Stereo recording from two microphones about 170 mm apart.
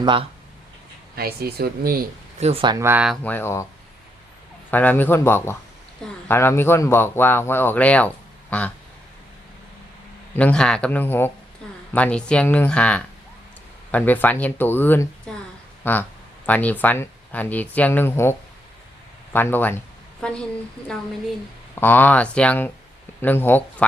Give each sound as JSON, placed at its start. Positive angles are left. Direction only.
{"t": 0.0, "sound": "speech", "side_deg": -30}
{"t": 1.1, "sound": "speech", "side_deg": -65}
{"t": 2.4, "sound": "speech", "side_deg": -35}
{"t": 2.7, "sound": "speech", "side_deg": -15}
{"t": 3.2, "sound": "speech", "side_deg": 15}
{"t": 4.7, "sound": "speech", "side_deg": 10}
{"t": 10.3, "sound": "speech", "side_deg": 5}
{"t": 15.3, "sound": "a sound", "side_deg": 5}
{"t": 15.8, "sound": "a woman's voice", "side_deg": 10}
{"t": 21.8, "sound": "speech", "side_deg": 10}